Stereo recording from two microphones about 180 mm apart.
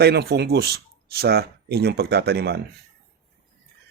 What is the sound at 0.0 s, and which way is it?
Speech, 65° right (ahead or behind).